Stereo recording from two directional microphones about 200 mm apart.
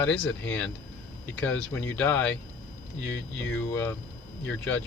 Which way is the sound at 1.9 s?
10° left (ahead or behind).